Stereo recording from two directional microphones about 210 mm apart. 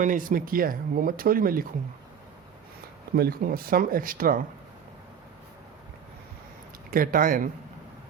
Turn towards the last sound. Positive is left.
turn(degrees=-40)  # may be behind; listen again after turning